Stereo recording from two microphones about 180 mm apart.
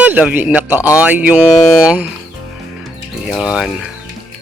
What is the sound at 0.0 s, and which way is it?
A man's voice, 10° right (ahead or behind).